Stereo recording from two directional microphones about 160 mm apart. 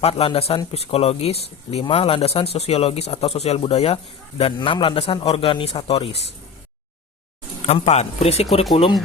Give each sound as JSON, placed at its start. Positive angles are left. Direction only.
{"t": 0.0, "sound": "speech", "side_deg": 35}
{"t": 7.7, "sound": "speech", "side_deg": 40}